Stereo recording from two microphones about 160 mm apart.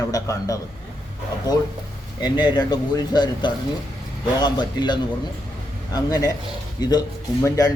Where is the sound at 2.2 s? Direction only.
25° left (ahead or behind).